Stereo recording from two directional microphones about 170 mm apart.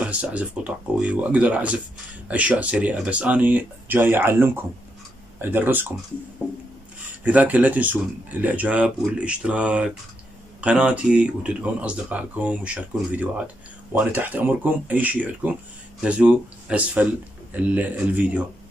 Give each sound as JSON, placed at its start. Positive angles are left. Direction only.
{"t": 0.0, "sound": "speech", "side_deg": -10}